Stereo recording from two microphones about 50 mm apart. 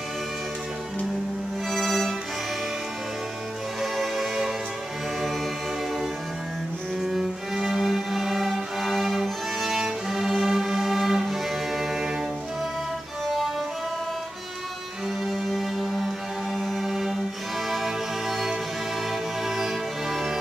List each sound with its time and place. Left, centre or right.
1.7 s music: centre
3.8 s music: centre
7.0 s cello: centre
15.3 s music: centre